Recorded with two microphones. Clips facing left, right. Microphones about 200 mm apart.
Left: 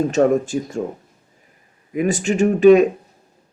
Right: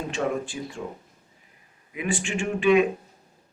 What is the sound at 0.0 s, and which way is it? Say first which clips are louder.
Speech: left 11 dB; 45° left (ahead or behind).